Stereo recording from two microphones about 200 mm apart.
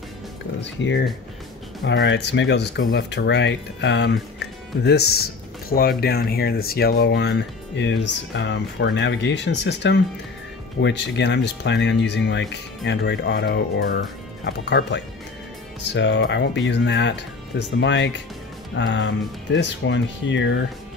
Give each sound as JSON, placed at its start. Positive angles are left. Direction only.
{"t": 0.7, "sound": "speech", "side_deg": 65}